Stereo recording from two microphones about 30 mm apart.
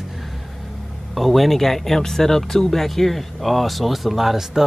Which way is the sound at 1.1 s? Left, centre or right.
Centre.